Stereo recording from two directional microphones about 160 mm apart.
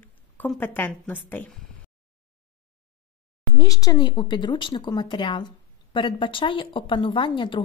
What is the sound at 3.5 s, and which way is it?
Speech, 20° left (ahead or behind).